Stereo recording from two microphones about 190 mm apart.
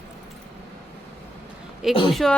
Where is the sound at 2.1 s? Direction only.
Centre (ahead or behind).